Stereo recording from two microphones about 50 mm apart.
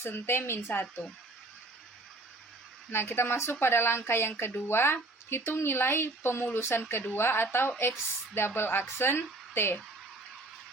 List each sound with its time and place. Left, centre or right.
0.0 s speech: left
0.7 s speech: left
2.9 s speech: left